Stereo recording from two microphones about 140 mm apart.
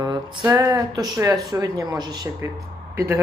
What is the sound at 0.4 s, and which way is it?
Speech, 20° right (ahead or behind).